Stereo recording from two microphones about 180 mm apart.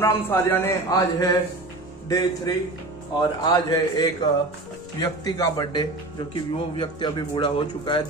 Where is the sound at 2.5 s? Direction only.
20° left (ahead or behind).